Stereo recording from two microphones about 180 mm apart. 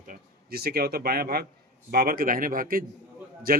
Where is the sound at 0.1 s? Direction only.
55° right (ahead or behind).